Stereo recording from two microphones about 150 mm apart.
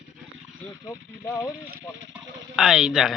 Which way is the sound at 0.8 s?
20° left (ahead or behind).